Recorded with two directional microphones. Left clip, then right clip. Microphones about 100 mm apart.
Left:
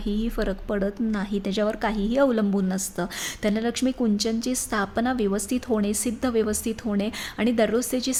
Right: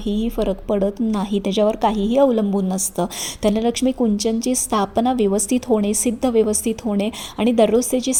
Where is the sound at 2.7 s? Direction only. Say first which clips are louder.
Right 6 dB; 25° right (ahead or behind).